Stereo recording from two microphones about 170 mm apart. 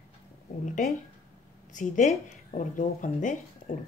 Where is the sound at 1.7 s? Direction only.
50° left (ahead or behind).